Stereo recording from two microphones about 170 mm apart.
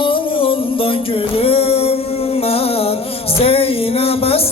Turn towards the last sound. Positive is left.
turn(degrees=35)  # may be behind; listen again after turning